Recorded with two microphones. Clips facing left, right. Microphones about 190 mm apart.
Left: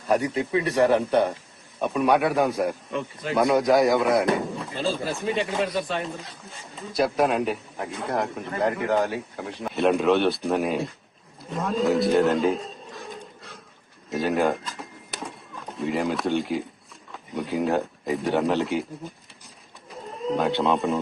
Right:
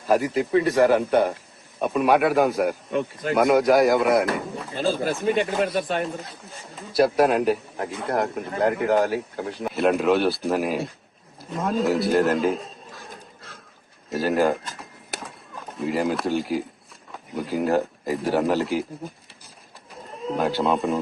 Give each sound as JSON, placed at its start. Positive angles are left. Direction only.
{"t": 0.0, "sound": "a man's voice", "side_deg": 0}
{"t": 5.6, "sound": "speech", "side_deg": -55}
{"t": 6.9, "sound": "a man's voice", "side_deg": -5}
{"t": 11.5, "sound": "a sound", "side_deg": 0}
{"t": 15.8, "sound": "a man's voice", "side_deg": 0}
{"t": 19.9, "sound": "speech", "side_deg": 0}